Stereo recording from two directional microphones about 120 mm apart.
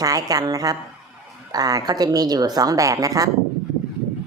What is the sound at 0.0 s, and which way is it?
A woman's voice, 30° right (ahead or behind).